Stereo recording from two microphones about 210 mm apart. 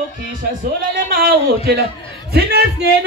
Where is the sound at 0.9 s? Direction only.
45° right (ahead or behind).